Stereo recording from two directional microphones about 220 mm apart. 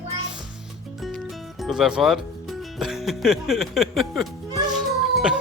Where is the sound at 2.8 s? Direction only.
Centre (ahead or behind).